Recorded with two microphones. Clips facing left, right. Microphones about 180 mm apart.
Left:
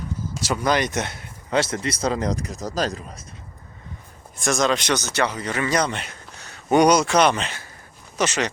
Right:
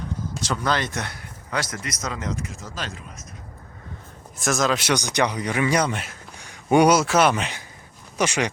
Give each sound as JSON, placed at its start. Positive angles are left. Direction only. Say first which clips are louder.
{"t": 0.4, "sound": "speech", "louder": "left 3 dB", "side_deg": 10}
{"t": 4.4, "sound": "speech", "louder": "left 1 dB", "side_deg": -5}